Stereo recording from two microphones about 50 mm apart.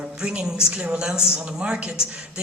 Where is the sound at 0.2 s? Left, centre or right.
Centre.